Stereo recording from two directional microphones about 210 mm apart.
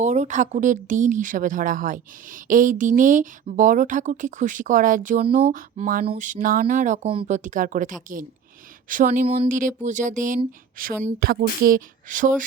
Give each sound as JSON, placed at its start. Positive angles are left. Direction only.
{"t": 0.0, "sound": "speech", "side_deg": -35}